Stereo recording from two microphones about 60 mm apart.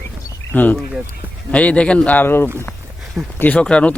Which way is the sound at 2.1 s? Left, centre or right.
Left.